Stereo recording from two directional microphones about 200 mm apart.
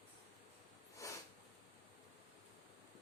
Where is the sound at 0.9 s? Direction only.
15° left (ahead or behind).